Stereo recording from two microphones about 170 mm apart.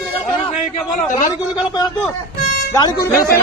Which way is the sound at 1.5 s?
25° left (ahead or behind).